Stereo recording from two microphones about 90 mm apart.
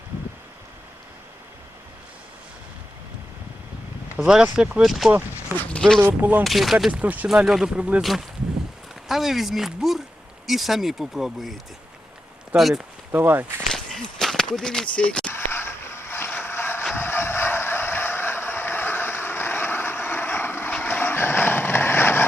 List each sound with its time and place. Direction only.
4.2 s speech: 5° right (ahead or behind)
6.0 s speech: 20° right (ahead or behind)
6.4 s speech: centre (ahead or behind)
6.9 s speech: 15° right (ahead or behind)
7.3 s speech: 5° right (ahead or behind)
9.0 s speech: 5° right (ahead or behind)
12.5 s speech: centre (ahead or behind)
13.1 s speech: 25° right (ahead or behind)
13.7 s a sound: centre (ahead or behind)
15.3 s vehicle: 25° left (ahead or behind)